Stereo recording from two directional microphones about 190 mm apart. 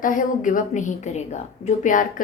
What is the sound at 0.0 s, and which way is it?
A woman's voice, 45° left (ahead or behind).